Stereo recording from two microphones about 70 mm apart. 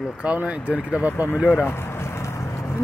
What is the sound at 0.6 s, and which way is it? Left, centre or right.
Speech, left.